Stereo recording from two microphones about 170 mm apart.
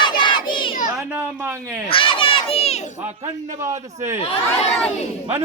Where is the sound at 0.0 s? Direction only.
25° left (ahead or behind).